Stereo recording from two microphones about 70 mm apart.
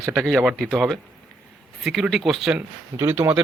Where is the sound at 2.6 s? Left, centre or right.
Right.